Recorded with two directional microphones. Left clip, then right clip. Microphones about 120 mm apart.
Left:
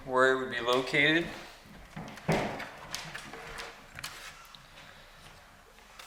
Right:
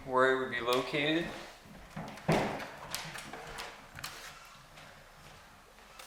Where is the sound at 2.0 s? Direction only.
Centre (ahead or behind).